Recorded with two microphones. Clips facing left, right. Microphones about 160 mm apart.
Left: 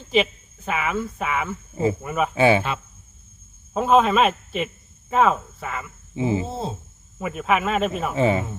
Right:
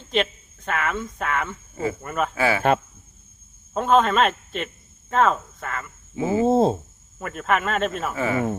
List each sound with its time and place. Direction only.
0.1 s a woman's voice: 5° left (ahead or behind)
1.7 s speech: 20° left (ahead or behind)
2.0 s speech: 5° left (ahead or behind)
2.3 s speech: 20° left (ahead or behind)
3.8 s speech: 5° left (ahead or behind)
6.1 s speech: 20° left (ahead or behind)
6.4 s a sound: 50° right (ahead or behind)
7.2 s speech: 5° left (ahead or behind)
8.1 s speech: 25° left (ahead or behind)